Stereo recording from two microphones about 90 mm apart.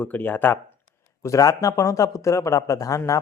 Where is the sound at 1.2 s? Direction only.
35° left (ahead or behind).